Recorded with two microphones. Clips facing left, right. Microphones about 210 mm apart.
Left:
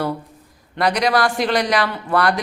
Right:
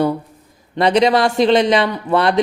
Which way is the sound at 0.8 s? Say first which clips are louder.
Right 5 dB; 25° right (ahead or behind).